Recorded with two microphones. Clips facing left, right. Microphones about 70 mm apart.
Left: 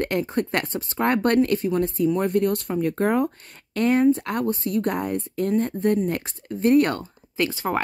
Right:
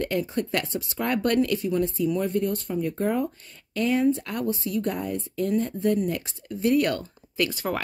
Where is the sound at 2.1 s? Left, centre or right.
Left.